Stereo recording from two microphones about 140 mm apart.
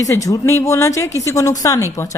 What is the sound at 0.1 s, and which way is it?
A woman's voice, 20° left (ahead or behind).